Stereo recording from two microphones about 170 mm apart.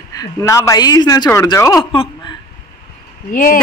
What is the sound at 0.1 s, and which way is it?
Speech, 20° left (ahead or behind).